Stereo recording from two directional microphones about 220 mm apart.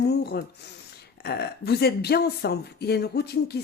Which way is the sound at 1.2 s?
45° left (ahead or behind).